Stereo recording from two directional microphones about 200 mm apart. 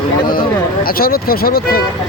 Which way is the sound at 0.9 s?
45° left (ahead or behind).